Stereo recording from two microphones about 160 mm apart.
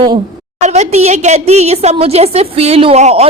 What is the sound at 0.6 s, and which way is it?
A woman's voice, 45° right (ahead or behind).